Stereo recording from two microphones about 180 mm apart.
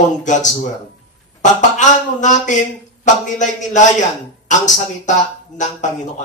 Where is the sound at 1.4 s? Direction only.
40° left (ahead or behind).